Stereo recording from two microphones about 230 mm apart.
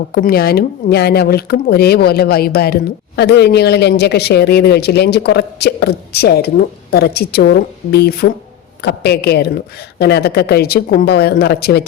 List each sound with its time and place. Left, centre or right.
0.1 s speech: left